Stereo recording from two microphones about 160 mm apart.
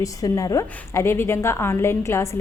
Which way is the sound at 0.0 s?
20° left (ahead or behind).